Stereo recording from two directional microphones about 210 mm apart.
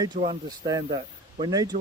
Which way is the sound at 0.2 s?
20° right (ahead or behind).